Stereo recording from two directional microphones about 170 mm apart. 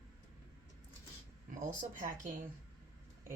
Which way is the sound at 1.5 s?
50° right (ahead or behind).